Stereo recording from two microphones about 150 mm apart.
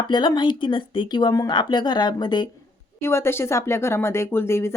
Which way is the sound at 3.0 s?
15° left (ahead or behind).